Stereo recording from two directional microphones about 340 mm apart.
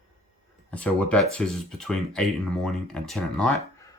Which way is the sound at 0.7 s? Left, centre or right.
Centre.